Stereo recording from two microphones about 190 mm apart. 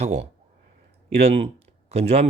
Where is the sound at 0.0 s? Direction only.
35° right (ahead or behind).